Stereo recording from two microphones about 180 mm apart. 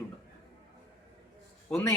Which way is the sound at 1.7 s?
15° left (ahead or behind).